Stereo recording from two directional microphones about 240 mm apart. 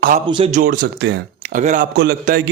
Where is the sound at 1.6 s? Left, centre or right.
Right.